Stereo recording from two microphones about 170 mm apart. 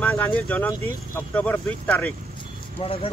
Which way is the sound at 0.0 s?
10° left (ahead or behind).